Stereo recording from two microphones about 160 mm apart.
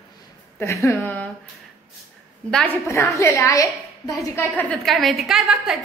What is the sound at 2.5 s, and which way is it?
A woman's voice, 15° left (ahead or behind).